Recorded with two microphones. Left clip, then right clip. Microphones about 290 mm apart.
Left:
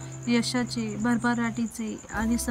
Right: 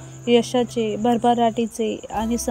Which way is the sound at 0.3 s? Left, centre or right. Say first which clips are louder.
Right 9 dB; centre.